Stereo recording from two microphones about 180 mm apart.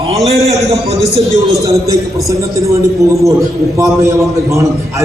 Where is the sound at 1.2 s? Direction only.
20° right (ahead or behind).